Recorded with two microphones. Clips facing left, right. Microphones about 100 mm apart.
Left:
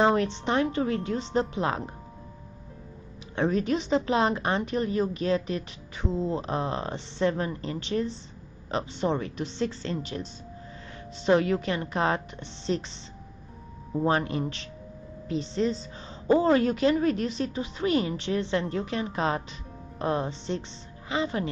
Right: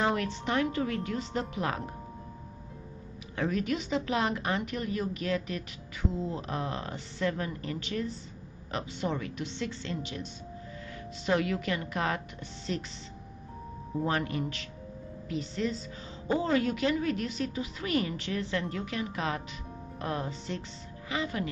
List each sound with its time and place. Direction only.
0.0 s a woman's voice: 30° left (ahead or behind)
3.3 s a woman's voice: 30° left (ahead or behind)
11.2 s a woman's voice: 30° left (ahead or behind)
14.0 s a woman's voice: 30° left (ahead or behind)